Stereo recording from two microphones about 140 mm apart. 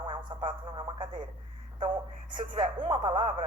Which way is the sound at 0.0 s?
35° right (ahead or behind).